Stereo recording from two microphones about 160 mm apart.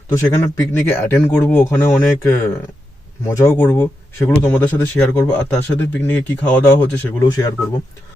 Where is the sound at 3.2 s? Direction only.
15° left (ahead or behind).